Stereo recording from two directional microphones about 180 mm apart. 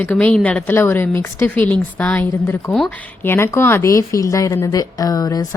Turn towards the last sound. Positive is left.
turn(degrees=20)  # may be behind; listen again after turning